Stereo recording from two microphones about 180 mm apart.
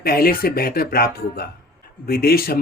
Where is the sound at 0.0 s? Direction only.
60° left (ahead or behind).